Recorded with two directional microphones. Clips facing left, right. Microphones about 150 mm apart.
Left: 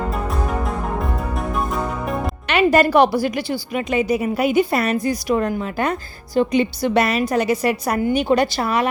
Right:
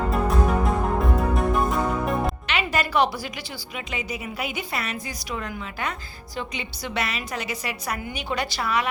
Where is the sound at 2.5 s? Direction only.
50° left (ahead or behind).